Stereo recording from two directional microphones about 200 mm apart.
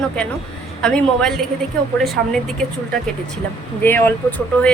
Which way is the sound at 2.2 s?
55° right (ahead or behind).